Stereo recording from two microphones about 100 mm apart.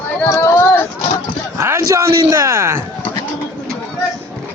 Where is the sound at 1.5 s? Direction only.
25° right (ahead or behind).